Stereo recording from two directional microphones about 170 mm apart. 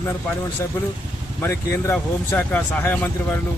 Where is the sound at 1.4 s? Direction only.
15° left (ahead or behind).